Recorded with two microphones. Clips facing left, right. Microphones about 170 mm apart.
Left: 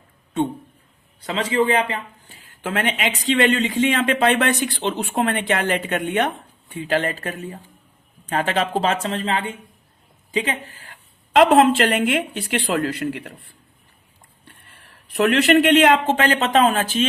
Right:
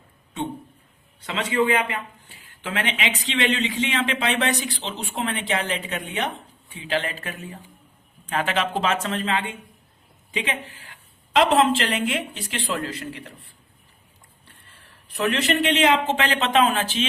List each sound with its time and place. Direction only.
1.2 s a man's voice: 35° left (ahead or behind); by 13.3 s 60° left (ahead or behind)
15.1 s a man's voice: 65° left (ahead or behind); by 17.1 s 45° left (ahead or behind)